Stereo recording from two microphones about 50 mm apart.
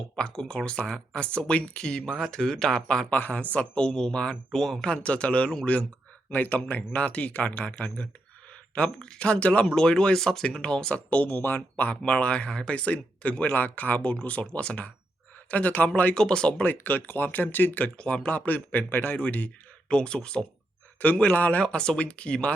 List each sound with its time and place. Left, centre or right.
0.2 s speech: centre
3.1 s speech: left
4.6 s speech: centre
4.9 s speech: left
8.7 s speech: centre
11.1 s speech: left
13.5 s speech: left
16.1 s speech: centre
16.6 s speech: left
17.9 s speech: centre
18.3 s speech: left
19.9 s speech: centre
21.0 s speech: left
21.6 s speech: centre